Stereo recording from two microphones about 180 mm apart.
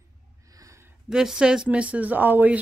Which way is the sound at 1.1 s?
5° right (ahead or behind).